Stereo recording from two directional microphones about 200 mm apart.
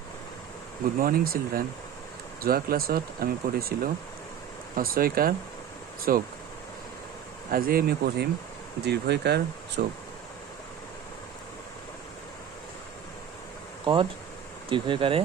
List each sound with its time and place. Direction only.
1.0 s speech: 45° right (ahead or behind)
7.5 s speech: 45° right (ahead or behind)
13.8 s speech: 25° right (ahead or behind)